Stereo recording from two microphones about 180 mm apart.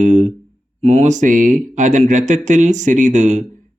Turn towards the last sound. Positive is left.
turn(degrees=-40)  # may be behind; listen again after turning